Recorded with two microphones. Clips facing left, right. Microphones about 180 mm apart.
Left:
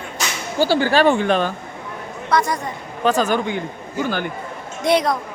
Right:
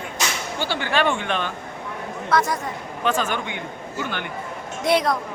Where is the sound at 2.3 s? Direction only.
Centre (ahead or behind).